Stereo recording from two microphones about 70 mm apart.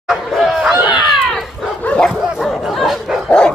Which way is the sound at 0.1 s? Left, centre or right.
Centre.